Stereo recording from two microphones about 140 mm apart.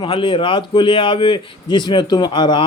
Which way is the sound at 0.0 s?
40° left (ahead or behind).